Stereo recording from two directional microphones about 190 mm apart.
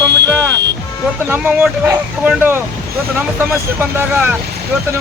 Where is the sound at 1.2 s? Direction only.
10° right (ahead or behind).